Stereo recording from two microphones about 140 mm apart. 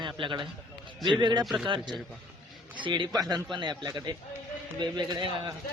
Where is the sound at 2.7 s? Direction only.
35° right (ahead or behind).